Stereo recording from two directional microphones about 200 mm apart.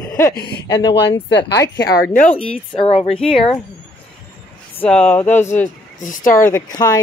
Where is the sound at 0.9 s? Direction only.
60° left (ahead or behind).